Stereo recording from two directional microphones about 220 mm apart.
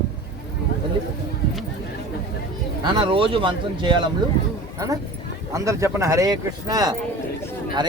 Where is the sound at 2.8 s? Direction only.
25° right (ahead or behind).